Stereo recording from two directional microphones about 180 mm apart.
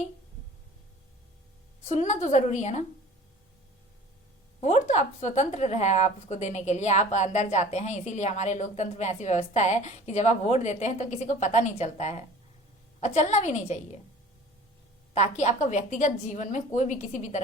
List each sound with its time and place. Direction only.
1.8 s a woman's voice: 40° left (ahead or behind)
4.6 s a woman's voice: 40° left (ahead or behind)
15.1 s a woman's voice: 40° left (ahead or behind)